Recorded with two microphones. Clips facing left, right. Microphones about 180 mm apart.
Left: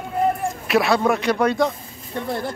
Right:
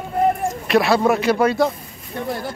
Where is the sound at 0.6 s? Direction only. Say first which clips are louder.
Right 2 dB; centre (ahead or behind).